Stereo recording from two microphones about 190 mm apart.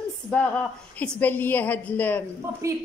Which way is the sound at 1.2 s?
10° left (ahead or behind).